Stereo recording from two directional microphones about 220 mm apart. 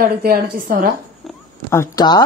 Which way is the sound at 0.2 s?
40° right (ahead or behind).